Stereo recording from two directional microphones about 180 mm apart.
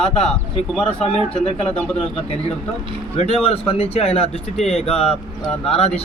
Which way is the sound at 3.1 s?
35° left (ahead or behind).